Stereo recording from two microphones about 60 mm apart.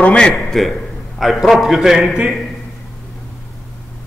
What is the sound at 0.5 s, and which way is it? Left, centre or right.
A man's voice, centre.